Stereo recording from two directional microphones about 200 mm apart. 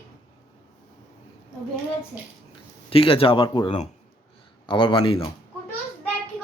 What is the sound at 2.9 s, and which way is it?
Speech, 25° left (ahead or behind).